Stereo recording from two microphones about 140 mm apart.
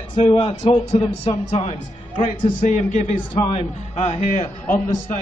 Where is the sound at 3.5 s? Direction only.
50° left (ahead or behind).